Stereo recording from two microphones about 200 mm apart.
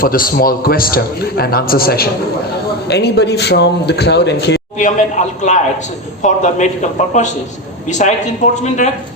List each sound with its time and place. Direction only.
0.0 s a man's voice: 45° left (ahead or behind)
4.8 s speech: 35° left (ahead or behind)